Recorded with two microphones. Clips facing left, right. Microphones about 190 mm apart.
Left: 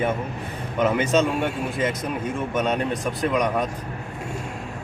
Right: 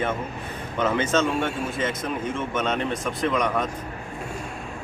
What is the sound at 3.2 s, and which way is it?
Speech, 15° left (ahead or behind).